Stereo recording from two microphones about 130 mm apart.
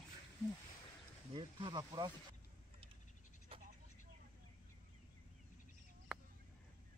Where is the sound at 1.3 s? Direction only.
35° right (ahead or behind).